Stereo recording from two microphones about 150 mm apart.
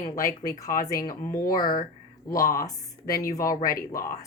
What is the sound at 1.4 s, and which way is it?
Speech, 65° left (ahead or behind).